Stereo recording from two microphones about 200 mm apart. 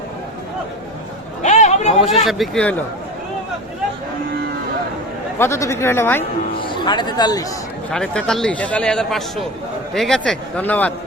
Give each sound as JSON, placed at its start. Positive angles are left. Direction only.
{"t": 1.4, "sound": "a sound", "side_deg": 35}
{"t": 2.0, "sound": "a man's voice", "side_deg": 0}
{"t": 5.4, "sound": "speech", "side_deg": 15}
{"t": 6.6, "sound": "speech", "side_deg": 25}
{"t": 7.9, "sound": "a man's voice", "side_deg": 5}